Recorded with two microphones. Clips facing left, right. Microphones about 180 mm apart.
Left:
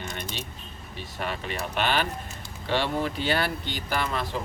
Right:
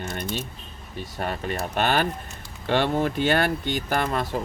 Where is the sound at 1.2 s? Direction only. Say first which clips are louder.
Right 3 dB; 45° right (ahead or behind).